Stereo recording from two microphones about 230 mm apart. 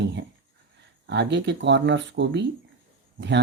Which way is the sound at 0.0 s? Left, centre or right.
Right.